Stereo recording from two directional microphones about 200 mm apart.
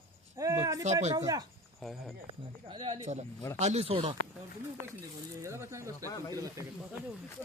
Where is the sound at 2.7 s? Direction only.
25° right (ahead or behind).